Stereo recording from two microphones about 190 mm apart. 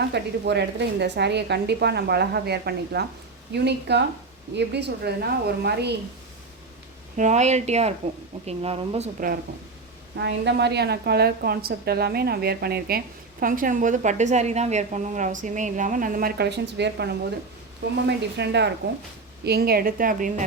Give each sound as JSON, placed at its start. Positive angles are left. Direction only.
{"t": 0.1, "sound": "a woman's voice", "side_deg": -60}
{"t": 7.2, "sound": "speech", "side_deg": -40}
{"t": 10.2, "sound": "a woman's voice", "side_deg": -65}